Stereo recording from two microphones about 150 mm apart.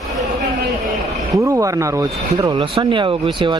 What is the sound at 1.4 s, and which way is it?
Speech, 20° right (ahead or behind).